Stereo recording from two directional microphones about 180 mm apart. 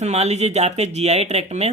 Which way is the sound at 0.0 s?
35° right (ahead or behind).